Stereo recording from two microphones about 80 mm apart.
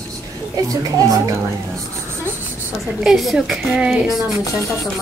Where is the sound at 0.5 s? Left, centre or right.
Right.